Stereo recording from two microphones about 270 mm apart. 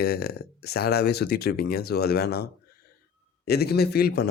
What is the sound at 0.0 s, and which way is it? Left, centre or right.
A man's voice, left.